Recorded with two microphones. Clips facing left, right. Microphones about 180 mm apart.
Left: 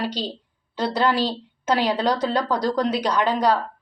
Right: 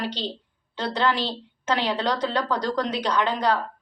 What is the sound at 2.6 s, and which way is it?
Speech, 35° left (ahead or behind).